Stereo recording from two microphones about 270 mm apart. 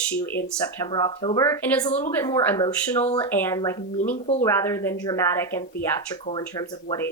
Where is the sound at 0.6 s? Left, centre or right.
Centre.